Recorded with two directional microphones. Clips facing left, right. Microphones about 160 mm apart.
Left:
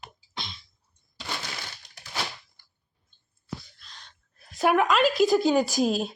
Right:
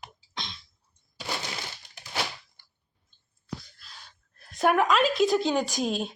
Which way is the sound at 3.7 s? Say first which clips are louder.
Right 1 dB; 5° right (ahead or behind).